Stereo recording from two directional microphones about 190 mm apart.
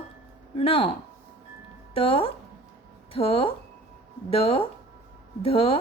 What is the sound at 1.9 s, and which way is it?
A woman's voice, 30° left (ahead or behind).